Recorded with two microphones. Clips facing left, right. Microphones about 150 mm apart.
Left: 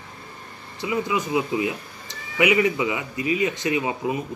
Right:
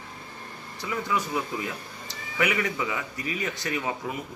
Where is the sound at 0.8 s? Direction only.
15° left (ahead or behind).